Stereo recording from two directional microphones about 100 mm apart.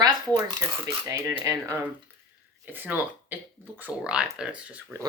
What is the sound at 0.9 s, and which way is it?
Speech, 25° right (ahead or behind).